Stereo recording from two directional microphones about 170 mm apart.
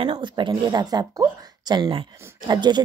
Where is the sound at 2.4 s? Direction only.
25° right (ahead or behind).